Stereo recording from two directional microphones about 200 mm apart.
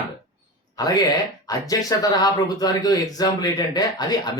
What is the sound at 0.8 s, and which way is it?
A man's voice, 20° left (ahead or behind).